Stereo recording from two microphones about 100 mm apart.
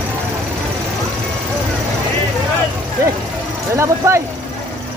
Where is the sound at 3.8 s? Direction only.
30° right (ahead or behind).